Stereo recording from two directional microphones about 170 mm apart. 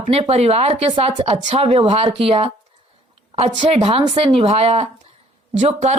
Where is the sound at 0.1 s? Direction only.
35° right (ahead or behind).